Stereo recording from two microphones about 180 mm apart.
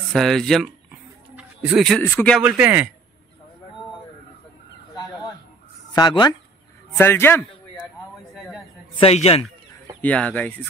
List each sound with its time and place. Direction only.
0.1 s speech: centre (ahead or behind)
1.3 s a sound: 5° right (ahead or behind)
2.0 s speech: 5° left (ahead or behind)
2.4 s a man's voice: 10° right (ahead or behind)
4.9 s chicken: 20° left (ahead or behind)
5.9 s speech: 25° left (ahead or behind)
7.0 s speech: 15° left (ahead or behind)
8.4 s a sound: centre (ahead or behind)
8.9 s a man's voice: 35° left (ahead or behind)
10.0 s speech: 5° left (ahead or behind)